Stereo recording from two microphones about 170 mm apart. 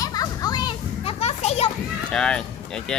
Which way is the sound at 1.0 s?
35° left (ahead or behind).